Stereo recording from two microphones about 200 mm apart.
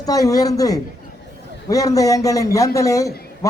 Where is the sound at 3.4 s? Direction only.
15° left (ahead or behind).